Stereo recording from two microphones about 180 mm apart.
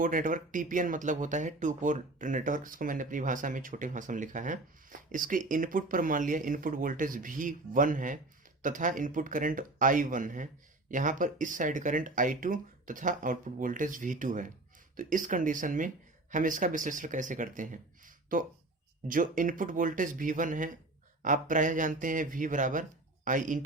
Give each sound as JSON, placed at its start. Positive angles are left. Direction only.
{"t": 0.0, "sound": "speech", "side_deg": -50}